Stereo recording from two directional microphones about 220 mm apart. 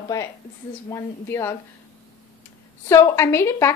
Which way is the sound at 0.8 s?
15° left (ahead or behind).